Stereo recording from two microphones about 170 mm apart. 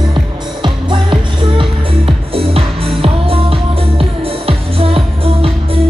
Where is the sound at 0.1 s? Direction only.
25° right (ahead or behind).